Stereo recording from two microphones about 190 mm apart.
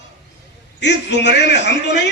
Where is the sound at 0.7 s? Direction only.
70° left (ahead or behind).